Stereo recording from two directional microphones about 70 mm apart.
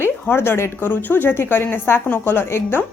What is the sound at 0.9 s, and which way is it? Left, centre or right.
A woman's voice, left.